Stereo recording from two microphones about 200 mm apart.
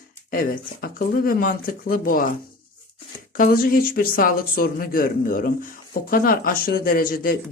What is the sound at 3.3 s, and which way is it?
Speech, 45° left (ahead or behind).